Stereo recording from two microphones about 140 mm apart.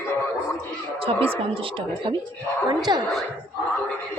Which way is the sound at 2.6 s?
30° right (ahead or behind).